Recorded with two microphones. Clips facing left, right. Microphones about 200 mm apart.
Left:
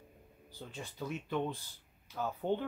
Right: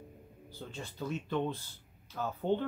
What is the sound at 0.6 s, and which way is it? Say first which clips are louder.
Speech: right 2 dB; 15° left (ahead or behind).